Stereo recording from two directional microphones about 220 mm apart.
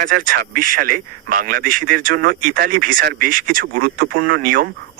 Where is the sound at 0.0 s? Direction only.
40° right (ahead or behind).